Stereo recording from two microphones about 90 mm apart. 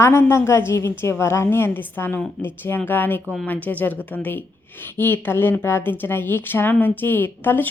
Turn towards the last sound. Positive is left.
turn(degrees=25)  # may be behind; listen again after turning